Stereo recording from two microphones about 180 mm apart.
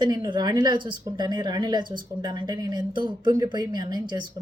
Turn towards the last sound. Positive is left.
turn(degrees=-25)  # may be behind; listen again after turning